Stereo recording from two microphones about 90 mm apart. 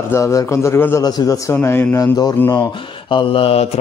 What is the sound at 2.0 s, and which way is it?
Mantra, 45° left (ahead or behind).